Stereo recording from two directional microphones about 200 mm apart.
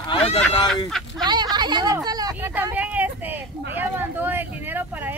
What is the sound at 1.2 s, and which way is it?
Speech, 20° right (ahead or behind).